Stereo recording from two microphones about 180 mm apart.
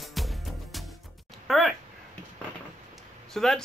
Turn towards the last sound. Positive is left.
turn(degrees=0)  # may be behind; listen again after turning